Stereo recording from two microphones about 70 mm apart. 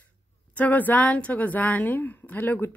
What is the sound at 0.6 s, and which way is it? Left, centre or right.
Speech, left.